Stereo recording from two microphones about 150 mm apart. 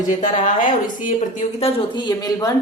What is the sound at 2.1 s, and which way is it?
Speech, 25° left (ahead or behind).